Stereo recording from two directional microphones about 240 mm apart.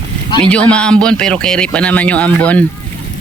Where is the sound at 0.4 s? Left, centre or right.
Centre.